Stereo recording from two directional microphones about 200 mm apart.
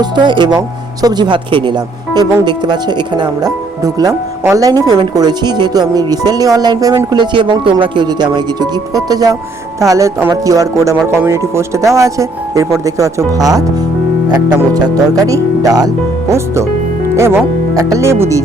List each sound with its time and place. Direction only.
0.0 s speech: 20° right (ahead or behind)
14.7 s speech: 20° right (ahead or behind)
17.2 s speech: 15° right (ahead or behind)